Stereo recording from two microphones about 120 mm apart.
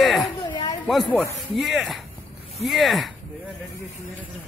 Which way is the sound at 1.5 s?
Centre (ahead or behind).